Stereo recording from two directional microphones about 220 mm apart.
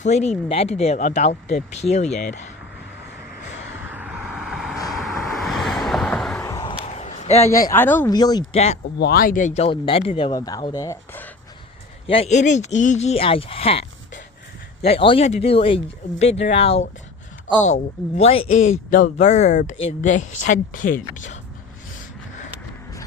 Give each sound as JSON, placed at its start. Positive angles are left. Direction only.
{"t": 0.0, "sound": "speech", "side_deg": 30}
{"t": 3.9, "sound": "vehicle", "side_deg": -5}
{"t": 6.4, "sound": "a sound", "side_deg": 15}
{"t": 7.4, "sound": "speech", "side_deg": 15}
{"t": 8.5, "sound": "speech", "side_deg": 30}
{"t": 9.0, "sound": "speech", "side_deg": 45}
{"t": 12.0, "sound": "speech", "side_deg": 25}
{"t": 14.8, "sound": "speech", "side_deg": 25}
{"t": 18.2, "sound": "speech", "side_deg": 25}